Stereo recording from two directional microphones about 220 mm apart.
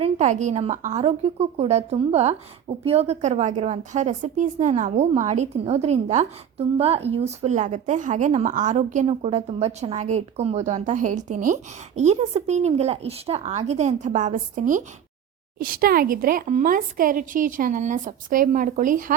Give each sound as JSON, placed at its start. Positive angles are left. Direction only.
{"t": 0.0, "sound": "a woman's voice", "side_deg": -30}